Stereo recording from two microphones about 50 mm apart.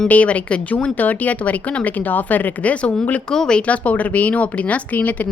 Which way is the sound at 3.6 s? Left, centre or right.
Left.